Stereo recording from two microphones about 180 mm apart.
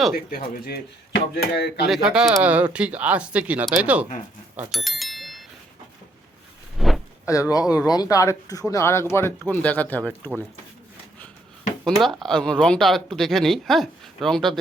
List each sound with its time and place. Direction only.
0.3 s speech: 50° left (ahead or behind)
1.1 s speech: 60° left (ahead or behind)
1.9 s speech: 5° right (ahead or behind)
4.7 s bicycle bell: centre (ahead or behind)
6.7 s a sound: centre (ahead or behind)
7.3 s speech: 15° left (ahead or behind)
11.9 s speech: centre (ahead or behind)